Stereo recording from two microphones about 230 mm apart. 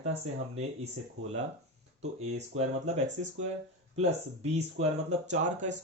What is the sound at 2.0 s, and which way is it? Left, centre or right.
Speech, right.